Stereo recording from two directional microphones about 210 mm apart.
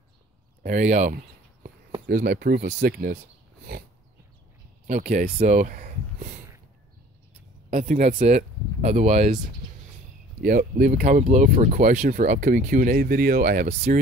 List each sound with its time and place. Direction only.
0.7 s speech: 35° right (ahead or behind)
4.8 s speech: 40° right (ahead or behind)
7.7 s speech: 35° right (ahead or behind)
10.4 s speech: 40° right (ahead or behind)